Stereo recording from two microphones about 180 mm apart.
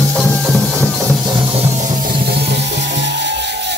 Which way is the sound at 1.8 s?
50° right (ahead or behind).